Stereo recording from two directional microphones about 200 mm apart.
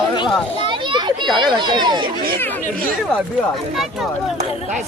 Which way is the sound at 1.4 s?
20° right (ahead or behind).